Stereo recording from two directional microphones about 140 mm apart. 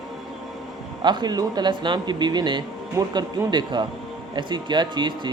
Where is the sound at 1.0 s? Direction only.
30° right (ahead or behind).